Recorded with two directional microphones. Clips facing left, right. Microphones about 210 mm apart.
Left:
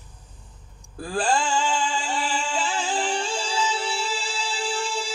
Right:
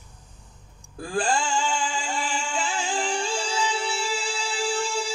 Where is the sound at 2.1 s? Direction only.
30° left (ahead or behind).